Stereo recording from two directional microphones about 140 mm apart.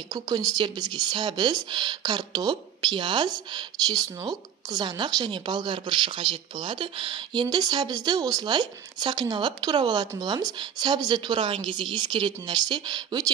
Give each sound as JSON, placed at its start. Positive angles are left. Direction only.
{"t": 0.1, "sound": "speech", "side_deg": -25}